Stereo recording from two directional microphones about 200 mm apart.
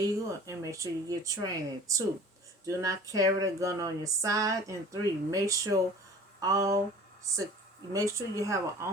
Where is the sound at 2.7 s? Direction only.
15° right (ahead or behind).